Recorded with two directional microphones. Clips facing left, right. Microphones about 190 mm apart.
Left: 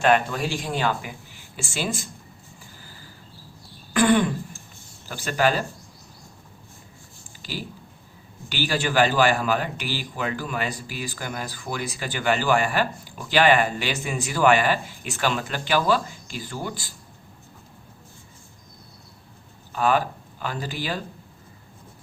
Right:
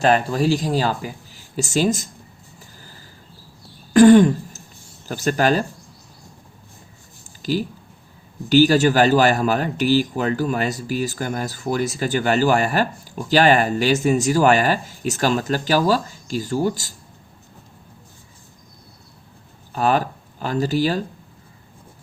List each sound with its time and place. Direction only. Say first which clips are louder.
0.0 s speech: right 3 dB; 35° right (ahead or behind)
3.9 s throat clearing: right 9 dB; 40° right (ahead or behind)
5.0 s speech: right 4 dB; 45° right (ahead or behind)
8.4 s speech: right 12 dB; 40° right (ahead or behind)
19.7 s speech: right 2 dB; 40° right (ahead or behind)